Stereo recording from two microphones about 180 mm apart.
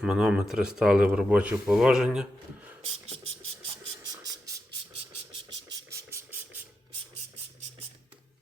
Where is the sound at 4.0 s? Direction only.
20° right (ahead or behind).